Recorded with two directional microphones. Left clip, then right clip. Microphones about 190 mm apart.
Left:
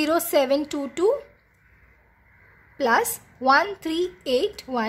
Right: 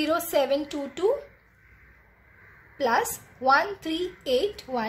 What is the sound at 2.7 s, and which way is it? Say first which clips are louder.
Speech: left 3 dB; 25° left (ahead or behind).